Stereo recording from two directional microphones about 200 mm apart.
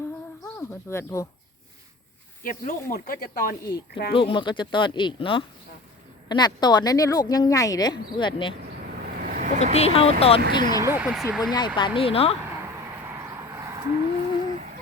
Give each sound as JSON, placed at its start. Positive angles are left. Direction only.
{"t": 0.4, "sound": "speech", "side_deg": 15}
{"t": 2.4, "sound": "speech", "side_deg": 45}
{"t": 4.1, "sound": "speech", "side_deg": 25}
{"t": 9.0, "sound": "vehicle", "side_deg": -45}
{"t": 9.7, "sound": "speech", "side_deg": 30}
{"t": 10.8, "sound": "speech", "side_deg": -10}
{"t": 11.5, "sound": "speech", "side_deg": 20}
{"t": 13.5, "sound": "a sound", "side_deg": -15}